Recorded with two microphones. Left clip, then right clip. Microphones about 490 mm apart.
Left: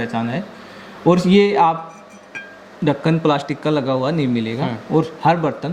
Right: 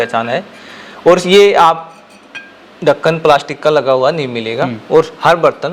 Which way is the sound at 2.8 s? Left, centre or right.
Right.